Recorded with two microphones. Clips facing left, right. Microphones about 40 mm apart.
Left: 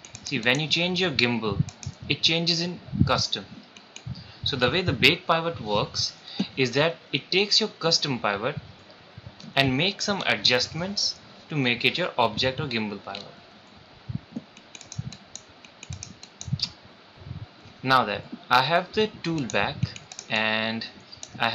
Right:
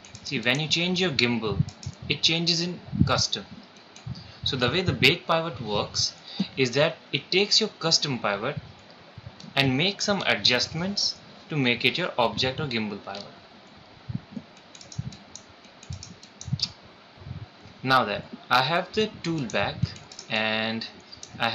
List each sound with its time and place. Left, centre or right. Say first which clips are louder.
0.6 s speech: left 1 dB; centre
4.5 s speech: left 1 dB; centre
17.8 s speech: left 1 dB; centre
19.9 s typing: left 1 dB; left
20.4 s speech: even; centre